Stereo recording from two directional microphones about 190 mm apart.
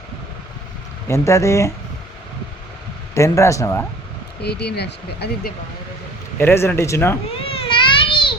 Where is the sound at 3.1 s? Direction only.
15° left (ahead or behind).